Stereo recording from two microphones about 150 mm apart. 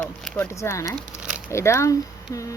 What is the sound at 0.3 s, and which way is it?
Speech, 20° left (ahead or behind).